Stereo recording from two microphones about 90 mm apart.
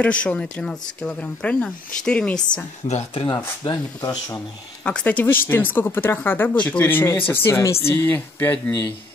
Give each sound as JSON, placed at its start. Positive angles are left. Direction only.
{"t": 0.0, "sound": "speech", "side_deg": 15}
{"t": 3.2, "sound": "speech", "side_deg": 60}
{"t": 4.8, "sound": "speech", "side_deg": 15}